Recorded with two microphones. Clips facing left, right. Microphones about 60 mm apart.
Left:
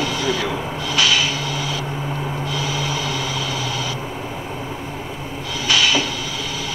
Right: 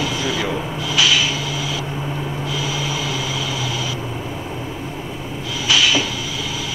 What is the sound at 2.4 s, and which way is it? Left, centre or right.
Vehicle, left.